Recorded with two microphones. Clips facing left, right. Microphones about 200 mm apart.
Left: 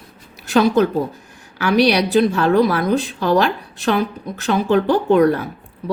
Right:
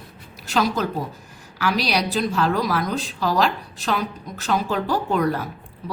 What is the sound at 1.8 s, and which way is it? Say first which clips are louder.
Speech: left 11 dB; 60° left (ahead or behind).